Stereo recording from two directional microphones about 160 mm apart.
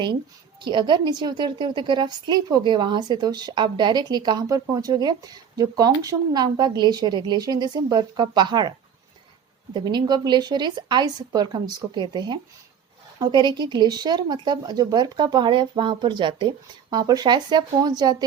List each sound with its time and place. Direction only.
0.6 s a woman's voice: 30° right (ahead or behind)
9.7 s a woman's voice: 30° right (ahead or behind)